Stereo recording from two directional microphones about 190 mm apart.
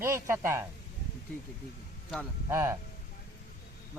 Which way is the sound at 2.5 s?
15° right (ahead or behind).